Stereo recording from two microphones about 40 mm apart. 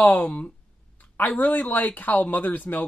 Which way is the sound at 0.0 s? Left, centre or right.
Left.